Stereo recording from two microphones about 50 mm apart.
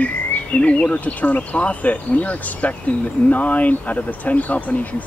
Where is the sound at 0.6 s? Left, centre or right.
Left.